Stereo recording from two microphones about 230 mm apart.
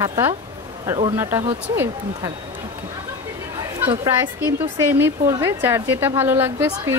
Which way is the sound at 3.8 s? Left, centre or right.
Right.